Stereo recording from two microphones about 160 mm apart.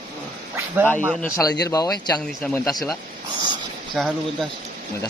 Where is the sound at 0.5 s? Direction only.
10° right (ahead or behind).